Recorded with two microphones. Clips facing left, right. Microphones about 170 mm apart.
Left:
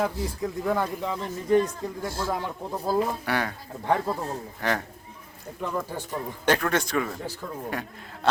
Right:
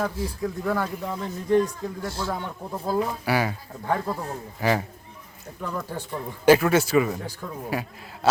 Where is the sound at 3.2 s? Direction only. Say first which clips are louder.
Right 3 dB; 5° right (ahead or behind).